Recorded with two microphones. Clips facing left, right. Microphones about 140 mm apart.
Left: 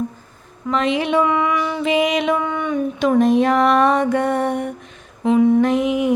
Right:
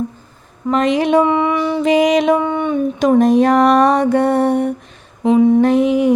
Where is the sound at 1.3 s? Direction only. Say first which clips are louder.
Right 4 dB; 30° right (ahead or behind).